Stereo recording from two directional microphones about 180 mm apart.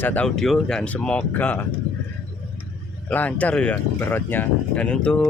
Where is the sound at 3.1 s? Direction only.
10° left (ahead or behind).